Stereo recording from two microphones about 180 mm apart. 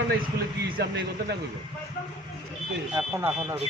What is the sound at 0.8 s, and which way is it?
Speech, 70° right (ahead or behind).